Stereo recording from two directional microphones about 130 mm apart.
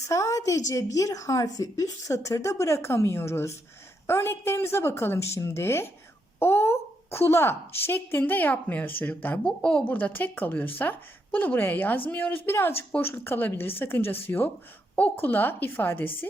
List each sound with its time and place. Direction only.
0.1 s a woman's voice: 25° left (ahead or behind)